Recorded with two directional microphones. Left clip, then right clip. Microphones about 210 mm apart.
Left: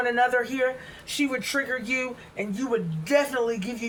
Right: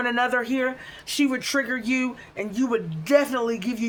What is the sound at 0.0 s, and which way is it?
Speech, 45° right (ahead or behind).